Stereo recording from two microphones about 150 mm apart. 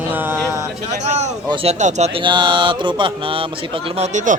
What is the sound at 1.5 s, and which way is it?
Speech, 35° right (ahead or behind).